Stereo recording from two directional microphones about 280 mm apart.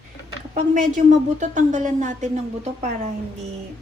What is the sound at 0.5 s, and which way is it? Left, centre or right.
A woman's voice, right.